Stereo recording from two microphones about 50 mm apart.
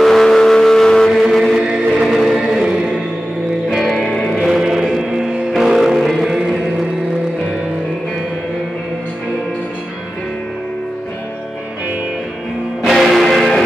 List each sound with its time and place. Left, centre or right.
0.0 s vehicle: centre
1.3 s chant: centre
1.9 s music: centre
3.7 s music: centre
4.0 s music: centre
4.4 s music: centre
12.8 s music: centre